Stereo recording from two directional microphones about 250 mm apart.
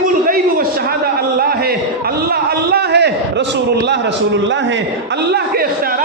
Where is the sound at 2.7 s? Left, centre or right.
Right.